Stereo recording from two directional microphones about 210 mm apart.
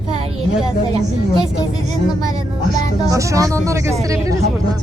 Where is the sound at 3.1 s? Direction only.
15° right (ahead or behind).